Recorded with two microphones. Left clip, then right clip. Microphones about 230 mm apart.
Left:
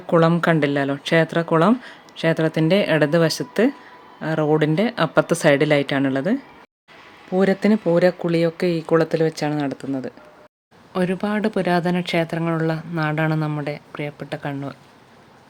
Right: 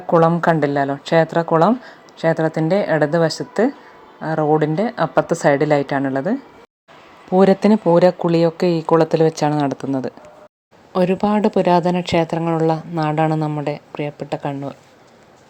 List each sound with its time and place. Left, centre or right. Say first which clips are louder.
0.1 s speech: right 3 dB; centre
7.3 s speech: right 5 dB; centre